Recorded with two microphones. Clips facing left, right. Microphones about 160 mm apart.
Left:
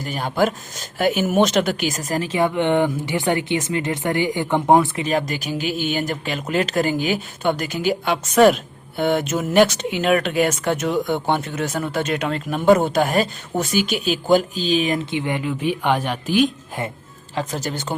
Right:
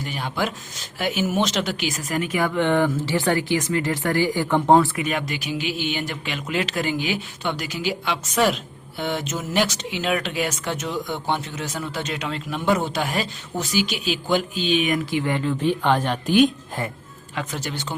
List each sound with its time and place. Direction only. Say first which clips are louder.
0.0 s speech: left 6 dB; 45° left (ahead or behind); by 4.9 s 20° left (ahead or behind)
4.9 s speech: left 4 dB; 35° left (ahead or behind); by 16.5 s 5° left (ahead or behind)
17.3 s speech: left 4 dB; 40° left (ahead or behind)